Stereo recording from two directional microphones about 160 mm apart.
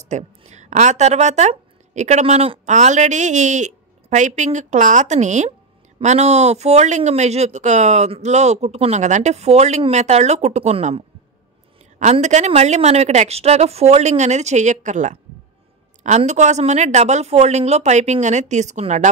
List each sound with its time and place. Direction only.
0.0 s speech: 45° right (ahead or behind)
12.0 s speech: 45° right (ahead or behind)